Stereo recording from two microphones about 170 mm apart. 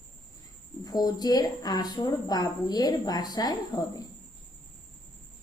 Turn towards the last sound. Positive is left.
turn(degrees=20)  # may be behind; listen again after turning